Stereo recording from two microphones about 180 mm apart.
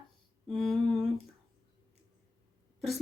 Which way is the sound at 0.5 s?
5° left (ahead or behind).